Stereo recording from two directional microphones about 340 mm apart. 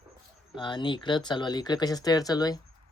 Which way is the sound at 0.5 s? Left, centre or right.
Centre.